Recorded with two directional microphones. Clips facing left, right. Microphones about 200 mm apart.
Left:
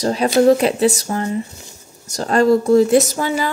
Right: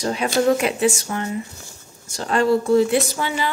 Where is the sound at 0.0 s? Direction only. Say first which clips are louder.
Left 6 dB; 35° left (ahead or behind).